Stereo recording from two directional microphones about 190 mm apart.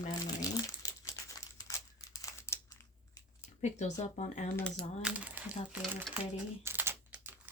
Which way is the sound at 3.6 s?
40° left (ahead or behind).